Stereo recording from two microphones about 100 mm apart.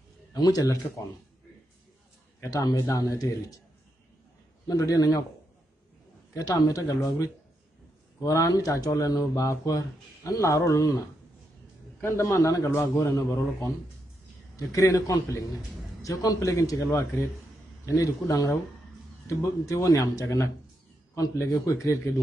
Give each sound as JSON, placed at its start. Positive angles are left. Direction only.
{"t": 0.3, "sound": "speech", "side_deg": 40}
{"t": 2.4, "sound": "speech", "side_deg": 35}
{"t": 4.6, "sound": "speech", "side_deg": 35}
{"t": 6.3, "sound": "speech", "side_deg": 35}
{"t": 8.2, "sound": "speech", "side_deg": 35}
{"t": 12.0, "sound": "a man's voice", "side_deg": 25}
{"t": 14.7, "sound": "speech", "side_deg": 35}